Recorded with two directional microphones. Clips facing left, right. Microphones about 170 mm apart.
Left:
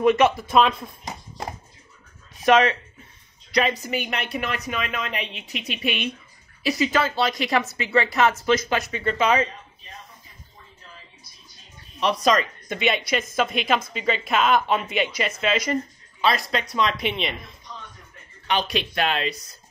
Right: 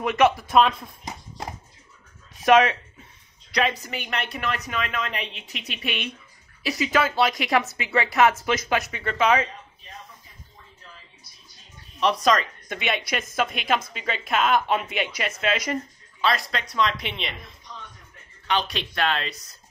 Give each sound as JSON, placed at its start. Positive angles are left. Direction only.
{"t": 0.0, "sound": "speech", "side_deg": -5}
{"t": 2.4, "sound": "speech", "side_deg": -5}
{"t": 3.5, "sound": "speech", "side_deg": 5}
{"t": 12.0, "sound": "speech", "side_deg": 5}
{"t": 16.2, "sound": "speech", "side_deg": 10}
{"t": 18.5, "sound": "speech", "side_deg": 10}